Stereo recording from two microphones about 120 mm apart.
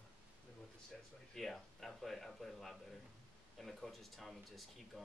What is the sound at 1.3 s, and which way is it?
Speech, centre (ahead or behind).